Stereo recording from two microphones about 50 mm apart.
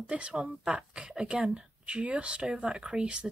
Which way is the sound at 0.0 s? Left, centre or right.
Right.